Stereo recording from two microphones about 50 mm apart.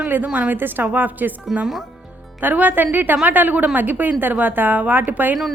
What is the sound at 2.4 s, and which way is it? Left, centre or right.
A woman's voice, right.